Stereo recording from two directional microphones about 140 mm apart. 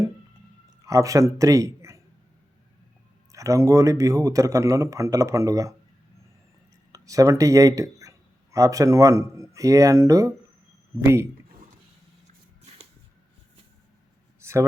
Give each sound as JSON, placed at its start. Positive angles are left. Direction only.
{"t": 0.8, "sound": "a man's voice", "side_deg": -25}
{"t": 3.3, "sound": "speech", "side_deg": -25}
{"t": 6.9, "sound": "speech", "side_deg": -25}
{"t": 14.4, "sound": "a sound", "side_deg": -20}